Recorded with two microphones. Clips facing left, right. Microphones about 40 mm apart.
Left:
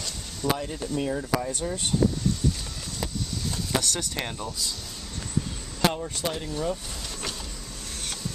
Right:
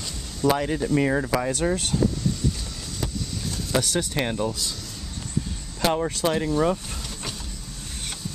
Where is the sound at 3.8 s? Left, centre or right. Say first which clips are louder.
Right 5 dB; centre.